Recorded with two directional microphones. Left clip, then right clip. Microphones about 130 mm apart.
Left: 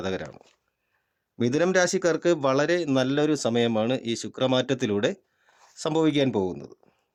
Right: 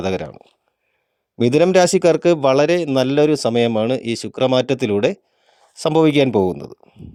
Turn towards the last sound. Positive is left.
turn(degrees=-55)  # may be behind; listen again after turning